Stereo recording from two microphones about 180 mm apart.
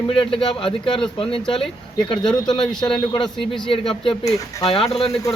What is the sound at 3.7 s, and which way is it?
Speech, 30° left (ahead or behind).